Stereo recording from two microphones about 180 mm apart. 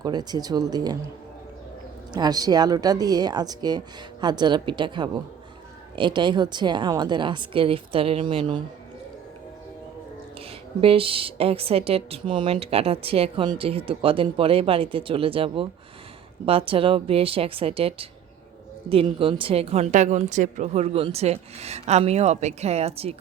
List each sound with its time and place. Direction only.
0.0 s a woman's voice: 20° right (ahead or behind)
2.1 s a woman's voice: 20° right (ahead or behind)
10.8 s a woman's voice: 30° right (ahead or behind)